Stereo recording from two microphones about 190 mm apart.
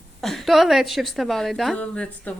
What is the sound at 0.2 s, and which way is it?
A woman's voice, centre (ahead or behind).